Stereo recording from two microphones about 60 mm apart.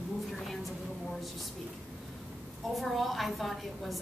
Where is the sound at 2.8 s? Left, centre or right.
Centre.